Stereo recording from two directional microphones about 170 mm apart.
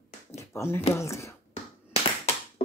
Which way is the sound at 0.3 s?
15° left (ahead or behind).